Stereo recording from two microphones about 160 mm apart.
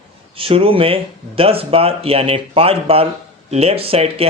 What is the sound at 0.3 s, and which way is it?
Speech, 35° right (ahead or behind).